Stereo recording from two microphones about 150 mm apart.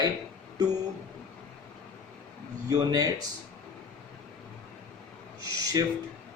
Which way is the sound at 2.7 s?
25° right (ahead or behind).